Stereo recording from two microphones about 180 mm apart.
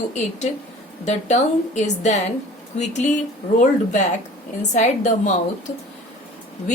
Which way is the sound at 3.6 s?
40° left (ahead or behind).